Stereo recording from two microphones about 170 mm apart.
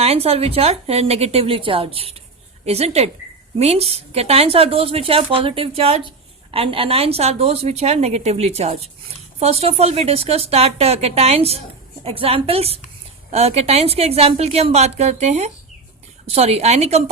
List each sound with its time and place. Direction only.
0.0 s a woman's voice: 35° right (ahead or behind)